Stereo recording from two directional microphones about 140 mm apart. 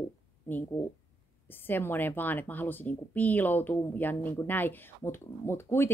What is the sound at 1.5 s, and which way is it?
Speech, 15° left (ahead or behind).